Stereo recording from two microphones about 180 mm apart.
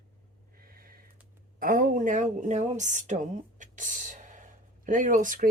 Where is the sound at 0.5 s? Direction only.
55° right (ahead or behind).